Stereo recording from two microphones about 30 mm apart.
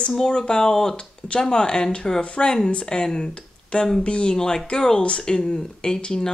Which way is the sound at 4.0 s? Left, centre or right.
Left.